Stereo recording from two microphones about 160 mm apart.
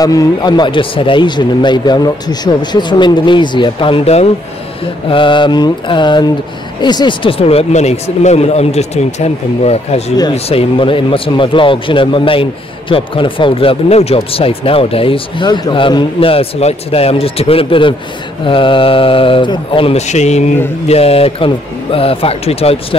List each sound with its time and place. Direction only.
0.0 s a man's voice: 20° left (ahead or behind); by 22.9 s 40° left (ahead or behind)